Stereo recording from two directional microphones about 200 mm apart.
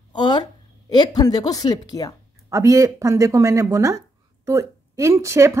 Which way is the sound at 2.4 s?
15° right (ahead or behind).